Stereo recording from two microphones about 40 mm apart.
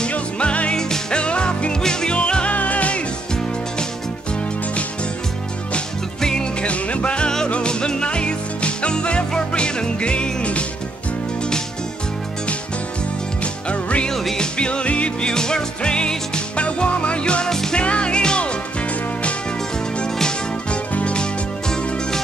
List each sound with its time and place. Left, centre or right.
0.1 s music: left
0.7 s music: centre
1.2 s music: left
2.1 s music: left
6.2 s music: centre
6.7 s music: left
13.4 s music: left
15.3 s music: centre
17.5 s music: centre
17.7 s music: left
20.7 s music: left